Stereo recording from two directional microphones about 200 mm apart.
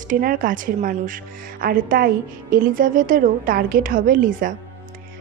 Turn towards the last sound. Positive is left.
turn(degrees=-45)  # may be behind; listen again after turning